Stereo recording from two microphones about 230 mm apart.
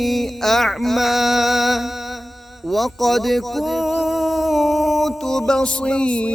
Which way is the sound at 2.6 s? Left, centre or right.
Centre.